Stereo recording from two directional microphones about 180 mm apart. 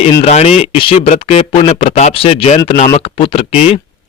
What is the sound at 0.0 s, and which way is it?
Speech, 35° left (ahead or behind).